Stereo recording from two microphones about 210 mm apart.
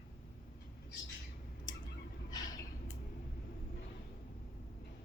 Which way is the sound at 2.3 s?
20° left (ahead or behind).